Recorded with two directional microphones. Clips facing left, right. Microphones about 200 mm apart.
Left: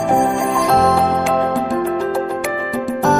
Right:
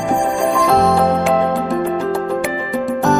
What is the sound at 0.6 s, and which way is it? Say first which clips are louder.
Music: right 1 dB; centre (ahead or behind).